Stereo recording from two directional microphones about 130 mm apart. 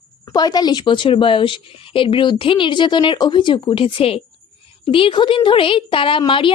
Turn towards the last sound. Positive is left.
turn(degrees=40)  # may be behind; listen again after turning